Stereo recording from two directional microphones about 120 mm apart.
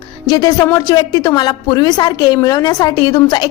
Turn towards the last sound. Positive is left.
turn(degrees=30)  # may be behind; listen again after turning